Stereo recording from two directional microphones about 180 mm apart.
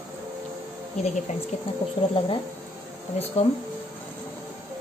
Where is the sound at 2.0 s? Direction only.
25° left (ahead or behind).